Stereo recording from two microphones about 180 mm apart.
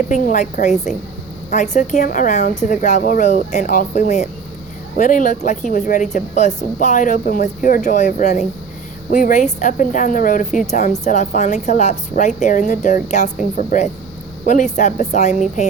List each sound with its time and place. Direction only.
0.1 s a woman's voice: 45° left (ahead or behind)